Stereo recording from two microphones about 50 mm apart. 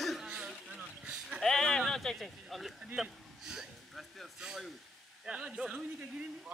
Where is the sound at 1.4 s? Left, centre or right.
Centre.